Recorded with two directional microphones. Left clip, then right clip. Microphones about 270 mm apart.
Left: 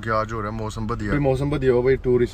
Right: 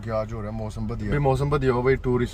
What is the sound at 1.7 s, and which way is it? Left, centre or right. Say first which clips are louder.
Speech: left 3 dB; right.